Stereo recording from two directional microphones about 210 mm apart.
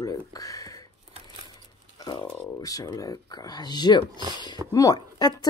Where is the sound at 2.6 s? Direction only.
15° left (ahead or behind).